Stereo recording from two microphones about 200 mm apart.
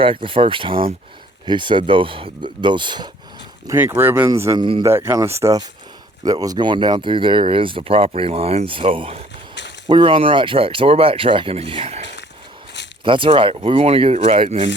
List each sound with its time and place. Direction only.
0.0 s speech: 25° right (ahead or behind)
3.7 s speech: 10° right (ahead or behind); by 12.0 s 30° right (ahead or behind)
13.1 s speech: 25° right (ahead or behind)